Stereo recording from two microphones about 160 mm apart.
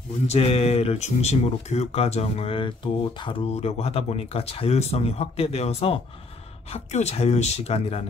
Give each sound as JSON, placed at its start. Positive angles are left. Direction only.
{"t": 0.3, "sound": "speech", "side_deg": 40}